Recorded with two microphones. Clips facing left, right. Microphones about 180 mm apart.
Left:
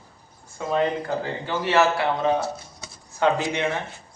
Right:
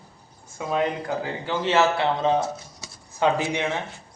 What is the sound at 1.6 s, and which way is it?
A man's voice, 20° right (ahead or behind).